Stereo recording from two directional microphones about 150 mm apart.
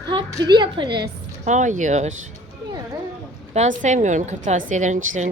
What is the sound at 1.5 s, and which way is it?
Speech, 55° right (ahead or behind).